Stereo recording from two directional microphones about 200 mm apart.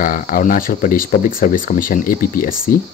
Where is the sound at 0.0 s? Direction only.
45° left (ahead or behind).